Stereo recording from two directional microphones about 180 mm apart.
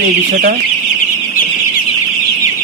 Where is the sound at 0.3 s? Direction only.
50° right (ahead or behind).